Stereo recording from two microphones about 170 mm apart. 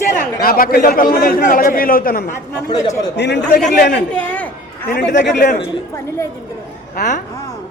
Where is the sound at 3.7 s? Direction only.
65° left (ahead or behind).